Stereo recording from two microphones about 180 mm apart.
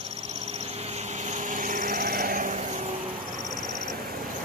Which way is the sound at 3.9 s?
55° right (ahead or behind).